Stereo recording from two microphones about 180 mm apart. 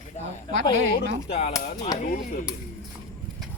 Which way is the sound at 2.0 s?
45° left (ahead or behind).